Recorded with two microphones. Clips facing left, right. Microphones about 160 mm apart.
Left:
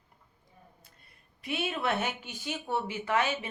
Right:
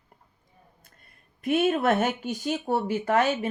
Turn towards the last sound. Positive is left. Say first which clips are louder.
# right 6 dB
turn(degrees=-40)  # may be behind; listen again after turning